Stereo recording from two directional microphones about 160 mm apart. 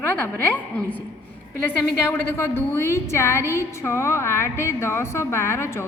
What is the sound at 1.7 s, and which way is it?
A woman's voice, 10° left (ahead or behind).